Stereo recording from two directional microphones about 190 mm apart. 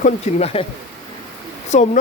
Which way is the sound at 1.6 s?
40° left (ahead or behind).